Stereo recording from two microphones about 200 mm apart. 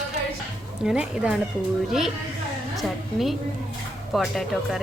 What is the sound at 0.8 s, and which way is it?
A woman's voice, 5° right (ahead or behind).